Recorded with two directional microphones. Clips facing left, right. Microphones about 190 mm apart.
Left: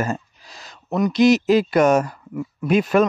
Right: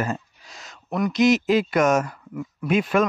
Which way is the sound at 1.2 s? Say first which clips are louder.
Left 3 dB; 35° left (ahead or behind).